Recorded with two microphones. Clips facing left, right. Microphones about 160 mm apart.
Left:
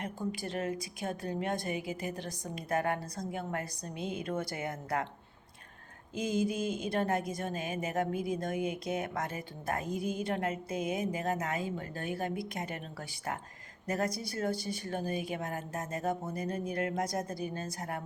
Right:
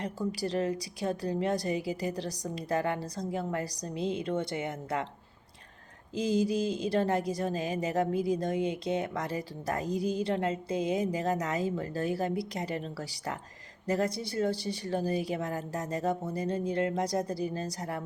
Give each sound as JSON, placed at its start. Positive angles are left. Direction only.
{"t": 0.3, "sound": "speech", "side_deg": -35}
{"t": 6.1, "sound": "speech", "side_deg": -35}